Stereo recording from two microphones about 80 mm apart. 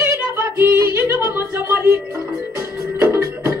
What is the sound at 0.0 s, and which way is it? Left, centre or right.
Music, right.